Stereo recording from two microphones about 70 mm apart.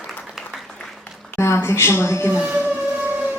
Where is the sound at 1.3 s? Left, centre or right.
Left.